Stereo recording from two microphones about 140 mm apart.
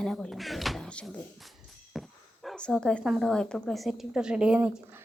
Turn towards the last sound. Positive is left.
turn(degrees=-10)  # may be behind; listen again after turning